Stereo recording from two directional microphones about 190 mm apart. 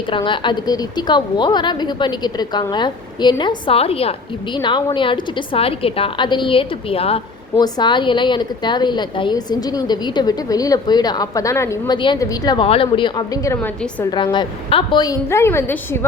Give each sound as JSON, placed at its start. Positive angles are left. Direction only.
{"t": 0.1, "sound": "a woman's voice", "side_deg": 25}
{"t": 14.3, "sound": "a woman's voice", "side_deg": 25}